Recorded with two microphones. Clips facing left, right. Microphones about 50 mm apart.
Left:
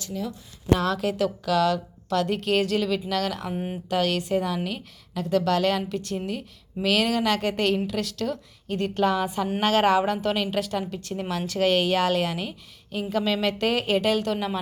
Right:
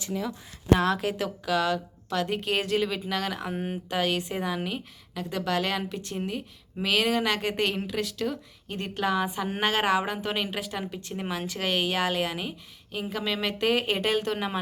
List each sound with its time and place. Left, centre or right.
0.8 s a woman's voice: right